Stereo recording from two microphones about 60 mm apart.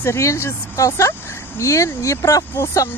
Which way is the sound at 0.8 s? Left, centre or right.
Left.